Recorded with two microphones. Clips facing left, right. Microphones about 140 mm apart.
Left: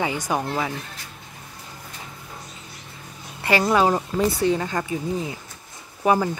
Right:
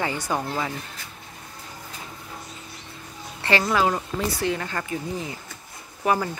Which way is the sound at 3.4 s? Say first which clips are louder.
Left 3 dB; 15° left (ahead or behind).